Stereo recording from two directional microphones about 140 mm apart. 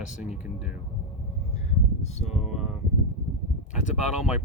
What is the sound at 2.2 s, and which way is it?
Speech, 5° right (ahead or behind).